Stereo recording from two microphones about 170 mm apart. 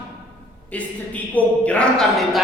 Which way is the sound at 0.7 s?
10° left (ahead or behind).